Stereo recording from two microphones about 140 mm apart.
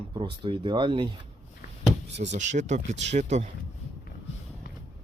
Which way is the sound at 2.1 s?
60° right (ahead or behind).